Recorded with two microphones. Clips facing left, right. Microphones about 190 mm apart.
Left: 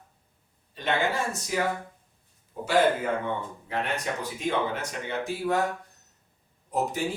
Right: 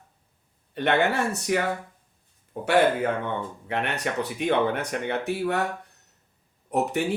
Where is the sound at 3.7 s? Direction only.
65° right (ahead or behind).